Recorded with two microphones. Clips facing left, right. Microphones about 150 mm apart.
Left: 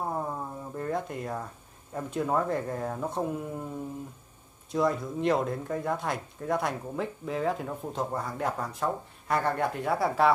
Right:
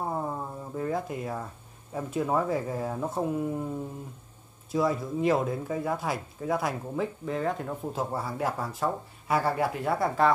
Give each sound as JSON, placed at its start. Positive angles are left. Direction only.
{"t": 0.1, "sound": "a sound", "side_deg": -5}
{"t": 2.0, "sound": "speech", "side_deg": -5}
{"t": 4.6, "sound": "speech", "side_deg": 0}